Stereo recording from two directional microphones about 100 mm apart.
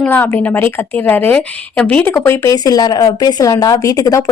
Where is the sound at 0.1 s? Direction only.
20° left (ahead or behind).